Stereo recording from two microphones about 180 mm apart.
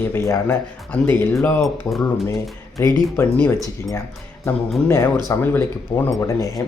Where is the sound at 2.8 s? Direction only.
15° left (ahead or behind).